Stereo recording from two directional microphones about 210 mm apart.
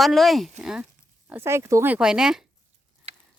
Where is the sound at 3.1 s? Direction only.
30° right (ahead or behind).